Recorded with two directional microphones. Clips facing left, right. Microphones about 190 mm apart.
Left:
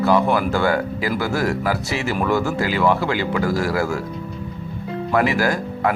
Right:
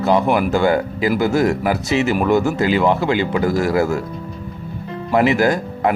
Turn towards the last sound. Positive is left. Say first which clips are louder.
# right 3 dB
turn(degrees=-20)  # may be behind; listen again after turning